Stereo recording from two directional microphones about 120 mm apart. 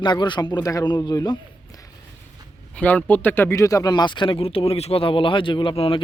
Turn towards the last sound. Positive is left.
turn(degrees=50)  # may be behind; listen again after turning